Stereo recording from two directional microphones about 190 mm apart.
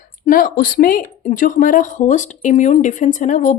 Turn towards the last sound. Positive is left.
turn(degrees=40)  # may be behind; listen again after turning